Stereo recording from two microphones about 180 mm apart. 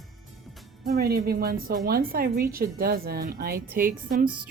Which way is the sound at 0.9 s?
55° right (ahead or behind).